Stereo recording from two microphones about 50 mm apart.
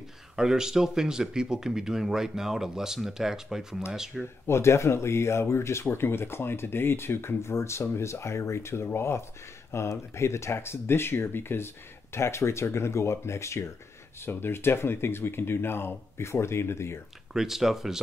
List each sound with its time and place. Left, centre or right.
0.4 s speech: centre
4.5 s speech: left
9.7 s speech: left
14.2 s speech: left
17.3 s speech: centre